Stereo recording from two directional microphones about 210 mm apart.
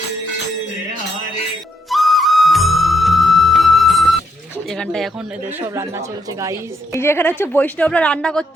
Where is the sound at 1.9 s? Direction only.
Centre (ahead or behind).